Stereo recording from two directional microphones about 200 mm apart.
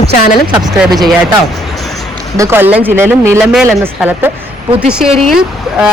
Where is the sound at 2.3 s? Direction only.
15° right (ahead or behind).